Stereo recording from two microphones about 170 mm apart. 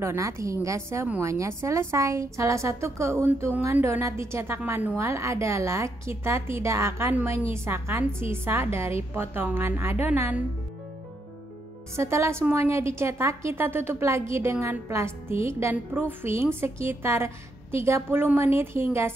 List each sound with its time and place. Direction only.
0.0 s a woman's voice: 15° right (ahead or behind)
12.0 s a woman's voice: 15° right (ahead or behind)